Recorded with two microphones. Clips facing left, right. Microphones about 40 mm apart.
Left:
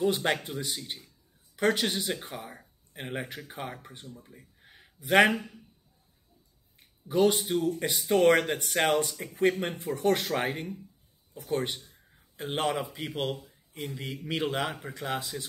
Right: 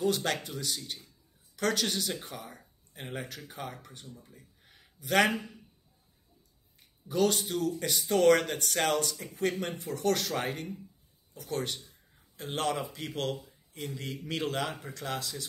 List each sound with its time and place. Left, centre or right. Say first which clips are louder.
0.0 s speech: left 3 dB; left
7.1 s a man's voice: left 4 dB; left